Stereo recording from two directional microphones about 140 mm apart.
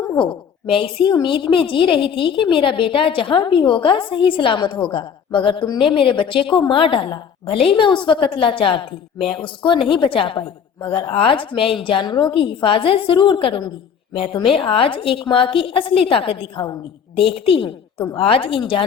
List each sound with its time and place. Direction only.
0.2 s a woman's voice: 40° left (ahead or behind)